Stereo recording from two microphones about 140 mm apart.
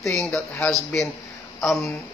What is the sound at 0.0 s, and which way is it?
Speech, 20° left (ahead or behind).